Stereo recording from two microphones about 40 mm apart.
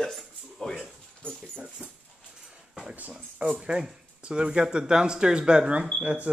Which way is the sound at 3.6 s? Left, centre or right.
Centre.